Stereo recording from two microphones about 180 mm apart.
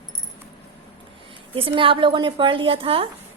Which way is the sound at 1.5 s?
30° right (ahead or behind).